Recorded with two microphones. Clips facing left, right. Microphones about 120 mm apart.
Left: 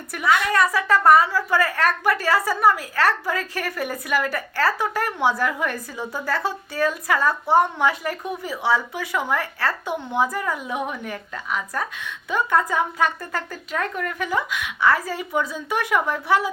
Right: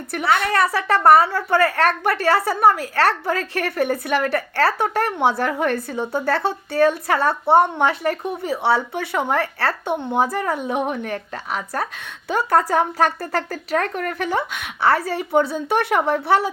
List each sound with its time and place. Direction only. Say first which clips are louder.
0.2 s a woman's voice: right 1 dB; 30° right (ahead or behind)
1.1 s a woman's voice: right 3 dB; 60° right (ahead or behind)
1.7 s a woman's voice: right 2 dB; 30° right (ahead or behind)
13.1 s speech: right 5 dB; 70° right (ahead or behind); by 14.3 s 50° right (ahead or behind)
14.3 s a woman's voice: right 2 dB; 30° right (ahead or behind)